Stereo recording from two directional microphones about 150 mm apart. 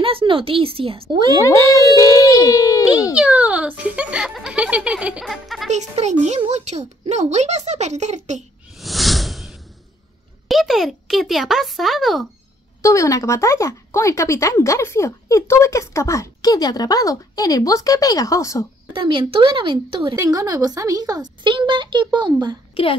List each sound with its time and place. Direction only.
0.0 s speech: 35° right (ahead or behind)
1.4 s speech: 20° left (ahead or behind)
2.0 s a sound: 20° left (ahead or behind)
3.2 s speech: 10° right (ahead or behind)
5.7 s a child's voice: 50° right (ahead or behind)
8.7 s a sound: centre (ahead or behind)
10.5 s speech: centre (ahead or behind)
12.8 s speech: 20° left (ahead or behind)
18.9 s speech: 35° right (ahead or behind)